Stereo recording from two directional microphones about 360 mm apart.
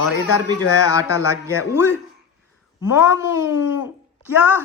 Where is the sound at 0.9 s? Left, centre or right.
Centre.